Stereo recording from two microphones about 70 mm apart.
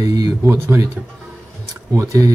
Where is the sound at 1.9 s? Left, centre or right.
Right.